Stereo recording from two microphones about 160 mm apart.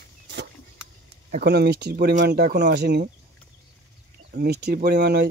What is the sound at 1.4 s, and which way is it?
Speech, 90° right.